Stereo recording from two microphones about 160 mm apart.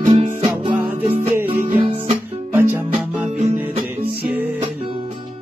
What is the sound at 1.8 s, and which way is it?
Music, 35° right (ahead or behind).